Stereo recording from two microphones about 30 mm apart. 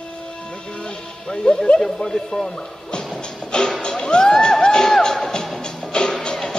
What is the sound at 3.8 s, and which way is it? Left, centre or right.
Music, left.